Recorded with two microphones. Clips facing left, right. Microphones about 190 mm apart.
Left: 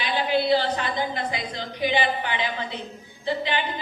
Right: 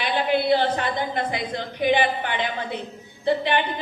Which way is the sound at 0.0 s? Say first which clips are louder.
Right 1 dB; 55° right (ahead or behind).